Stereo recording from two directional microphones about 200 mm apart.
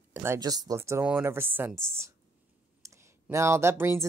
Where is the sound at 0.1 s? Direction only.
10° right (ahead or behind).